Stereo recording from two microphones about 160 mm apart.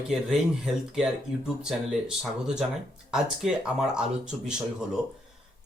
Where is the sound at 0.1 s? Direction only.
5° right (ahead or behind).